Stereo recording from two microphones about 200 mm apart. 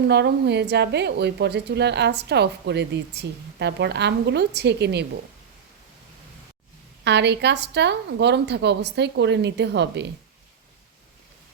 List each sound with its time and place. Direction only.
0.1 s a woman's voice: 55° right (ahead or behind)
7.0 s a woman's voice: 60° right (ahead or behind)